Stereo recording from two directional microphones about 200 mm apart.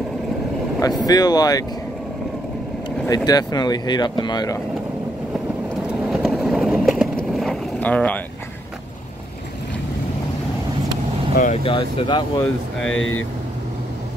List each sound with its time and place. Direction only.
0.7 s speech: 20° left (ahead or behind)
3.3 s speech: 20° left (ahead or behind)
5.9 s vehicle: 5° right (ahead or behind)
11.3 s speech: 30° left (ahead or behind)
12.8 s speech: 80° left